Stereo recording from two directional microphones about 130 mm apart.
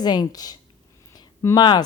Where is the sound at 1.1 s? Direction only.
30° left (ahead or behind).